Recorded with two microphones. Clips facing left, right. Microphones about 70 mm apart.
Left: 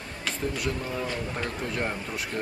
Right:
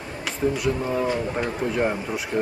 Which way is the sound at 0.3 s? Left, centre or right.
Centre.